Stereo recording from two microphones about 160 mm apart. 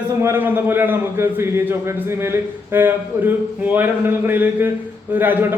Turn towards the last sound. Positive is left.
turn(degrees=-15)  # may be behind; listen again after turning